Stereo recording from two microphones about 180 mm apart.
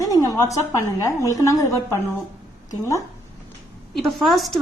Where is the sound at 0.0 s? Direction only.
20° left (ahead or behind).